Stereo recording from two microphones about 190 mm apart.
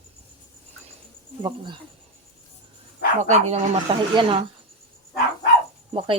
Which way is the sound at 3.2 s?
40° right (ahead or behind).